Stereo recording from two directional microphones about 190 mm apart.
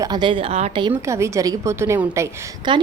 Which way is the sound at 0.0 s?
25° right (ahead or behind).